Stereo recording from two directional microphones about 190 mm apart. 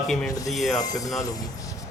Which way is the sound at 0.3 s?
20° left (ahead or behind).